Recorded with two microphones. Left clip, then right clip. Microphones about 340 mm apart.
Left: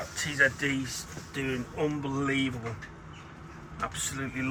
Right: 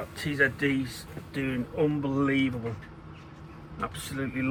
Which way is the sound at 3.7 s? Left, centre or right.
Centre.